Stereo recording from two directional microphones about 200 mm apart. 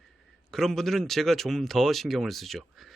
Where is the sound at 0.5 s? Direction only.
Centre (ahead or behind).